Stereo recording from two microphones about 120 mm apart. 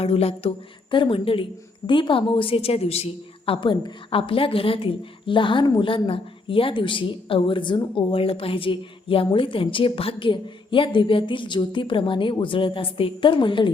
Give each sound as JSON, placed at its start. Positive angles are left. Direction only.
{"t": 0.0, "sound": "a woman's voice", "side_deg": 55}